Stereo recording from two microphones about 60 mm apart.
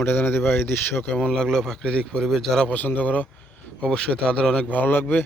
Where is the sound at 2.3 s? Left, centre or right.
Centre.